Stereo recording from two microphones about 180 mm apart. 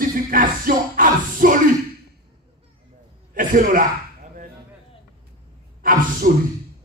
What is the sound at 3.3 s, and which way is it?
Speech, 50° right (ahead or behind).